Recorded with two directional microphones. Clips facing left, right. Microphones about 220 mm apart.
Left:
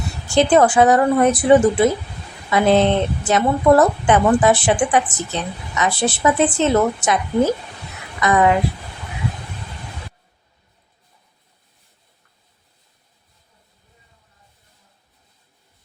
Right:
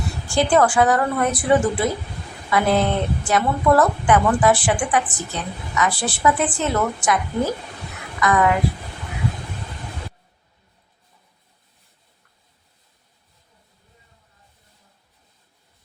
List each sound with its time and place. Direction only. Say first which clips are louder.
0.3 s a woman's voice: left 4 dB; 20° left (ahead or behind)